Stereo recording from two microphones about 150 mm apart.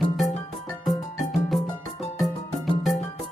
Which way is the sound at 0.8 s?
Centre (ahead or behind).